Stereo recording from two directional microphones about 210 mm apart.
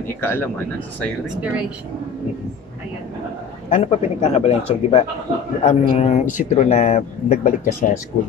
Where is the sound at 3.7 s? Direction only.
30° left (ahead or behind).